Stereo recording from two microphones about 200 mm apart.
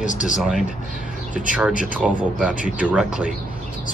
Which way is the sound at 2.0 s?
Centre (ahead or behind).